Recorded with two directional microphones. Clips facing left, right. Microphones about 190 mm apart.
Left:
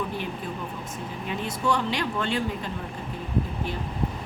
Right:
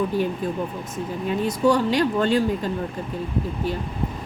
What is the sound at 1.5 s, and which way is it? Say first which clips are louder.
Speech: right 7 dB; 40° right (ahead or behind).